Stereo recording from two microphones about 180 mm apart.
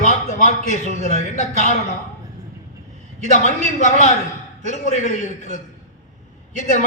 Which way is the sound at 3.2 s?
45° left (ahead or behind).